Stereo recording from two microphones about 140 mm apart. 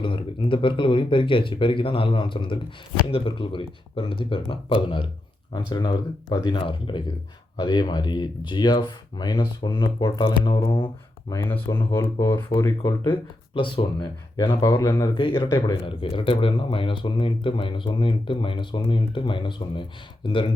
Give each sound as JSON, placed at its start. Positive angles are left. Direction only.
{"t": 0.0, "sound": "speech", "side_deg": 35}
{"t": 11.3, "sound": "speech", "side_deg": 20}
{"t": 13.1, "sound": "speech", "side_deg": 35}
{"t": 16.0, "sound": "speech", "side_deg": 40}